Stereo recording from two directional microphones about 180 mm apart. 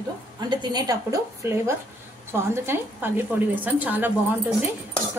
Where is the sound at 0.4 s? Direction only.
25° right (ahead or behind).